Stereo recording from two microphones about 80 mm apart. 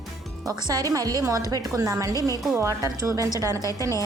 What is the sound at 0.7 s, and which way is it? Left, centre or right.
Speech, right.